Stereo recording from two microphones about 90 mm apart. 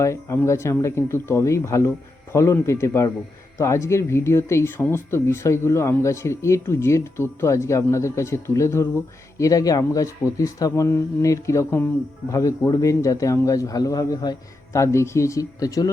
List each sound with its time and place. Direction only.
0.0 s speech: 30° left (ahead or behind); by 14.3 s 50° left (ahead or behind)
14.7 s speech: 35° left (ahead or behind)